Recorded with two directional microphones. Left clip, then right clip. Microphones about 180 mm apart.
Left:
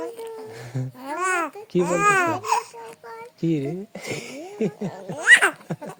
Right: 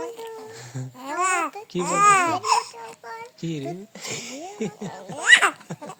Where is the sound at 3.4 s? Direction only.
50° left (ahead or behind).